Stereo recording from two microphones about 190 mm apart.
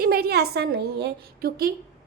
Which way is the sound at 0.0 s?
55° right (ahead or behind).